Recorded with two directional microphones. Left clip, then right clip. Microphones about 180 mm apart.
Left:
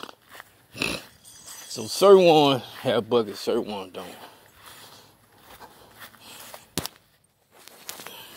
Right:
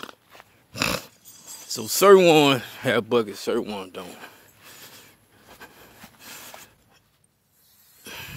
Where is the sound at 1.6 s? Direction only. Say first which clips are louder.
Right 1 dB; 25° right (ahead or behind).